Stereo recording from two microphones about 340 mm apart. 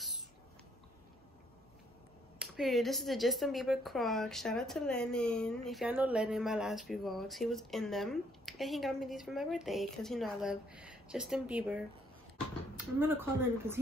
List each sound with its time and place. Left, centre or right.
2.3 s speech: centre